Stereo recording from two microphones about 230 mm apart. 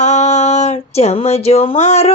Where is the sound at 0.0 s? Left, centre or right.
Left.